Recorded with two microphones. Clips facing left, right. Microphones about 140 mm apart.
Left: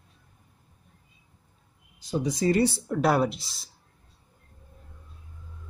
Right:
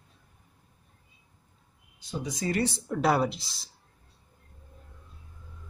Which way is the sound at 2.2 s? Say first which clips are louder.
Left 6 dB; 30° left (ahead or behind).